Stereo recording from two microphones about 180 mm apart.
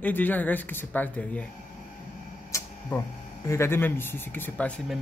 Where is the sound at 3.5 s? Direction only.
15° left (ahead or behind).